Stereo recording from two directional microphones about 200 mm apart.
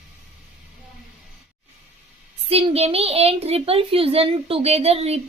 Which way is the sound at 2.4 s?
30° right (ahead or behind).